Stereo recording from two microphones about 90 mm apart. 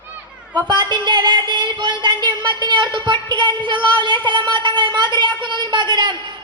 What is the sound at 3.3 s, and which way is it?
A woman's voice, 55° right (ahead or behind).